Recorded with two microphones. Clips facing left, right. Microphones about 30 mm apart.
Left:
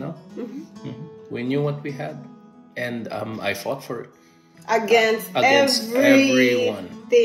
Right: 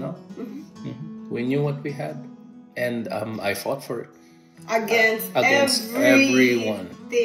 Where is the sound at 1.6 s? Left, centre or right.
Centre.